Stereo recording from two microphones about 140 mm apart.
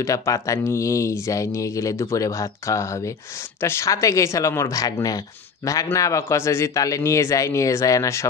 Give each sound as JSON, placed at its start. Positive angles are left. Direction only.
{"t": 0.0, "sound": "speech", "side_deg": 20}